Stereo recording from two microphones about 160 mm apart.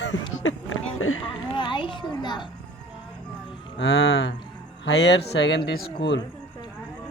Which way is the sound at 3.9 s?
90° left.